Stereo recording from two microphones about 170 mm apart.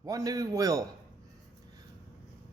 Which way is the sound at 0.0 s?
20° right (ahead or behind).